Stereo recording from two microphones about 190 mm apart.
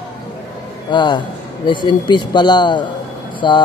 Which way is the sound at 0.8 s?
25° left (ahead or behind).